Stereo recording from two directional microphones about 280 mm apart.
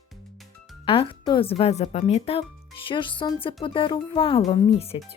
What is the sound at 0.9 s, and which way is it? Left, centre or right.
Speech, centre.